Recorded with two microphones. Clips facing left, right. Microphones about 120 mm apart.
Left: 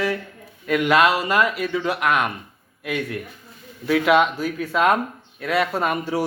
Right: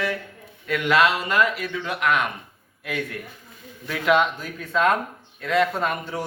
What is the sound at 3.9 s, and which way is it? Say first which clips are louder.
A man's voice: left 3 dB; 10° left (ahead or behind).